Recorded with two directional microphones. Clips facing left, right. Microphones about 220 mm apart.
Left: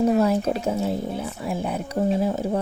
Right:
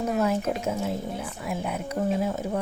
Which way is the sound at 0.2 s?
35° left (ahead or behind).